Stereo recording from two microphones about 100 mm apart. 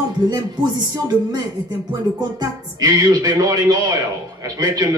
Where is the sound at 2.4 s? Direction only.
40° right (ahead or behind).